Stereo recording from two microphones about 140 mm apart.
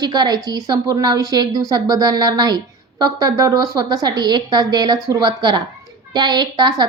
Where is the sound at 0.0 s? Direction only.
30° right (ahead or behind).